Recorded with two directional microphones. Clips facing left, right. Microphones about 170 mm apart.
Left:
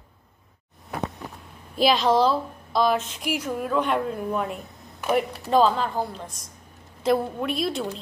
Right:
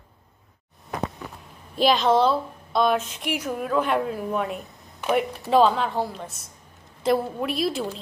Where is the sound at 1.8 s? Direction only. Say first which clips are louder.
Even; centre (ahead or behind).